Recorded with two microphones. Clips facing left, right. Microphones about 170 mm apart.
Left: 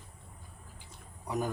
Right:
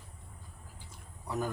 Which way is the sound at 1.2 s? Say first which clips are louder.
Left 1 dB; 15° left (ahead or behind).